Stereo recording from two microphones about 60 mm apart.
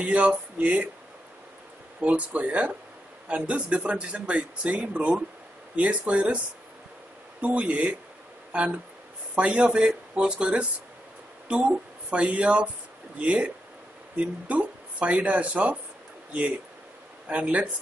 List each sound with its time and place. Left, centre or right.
0.0 s speech: right
2.0 s speech: right
17.3 s speech: right